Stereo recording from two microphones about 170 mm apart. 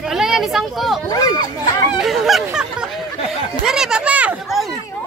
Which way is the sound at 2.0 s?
Centre (ahead or behind).